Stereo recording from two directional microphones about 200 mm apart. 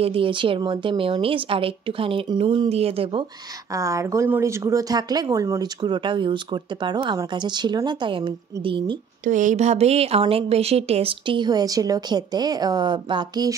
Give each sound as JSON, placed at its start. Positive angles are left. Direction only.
{"t": 0.0, "sound": "speech", "side_deg": -25}
{"t": 3.7, "sound": "speech", "side_deg": -15}
{"t": 9.2, "sound": "speech", "side_deg": -40}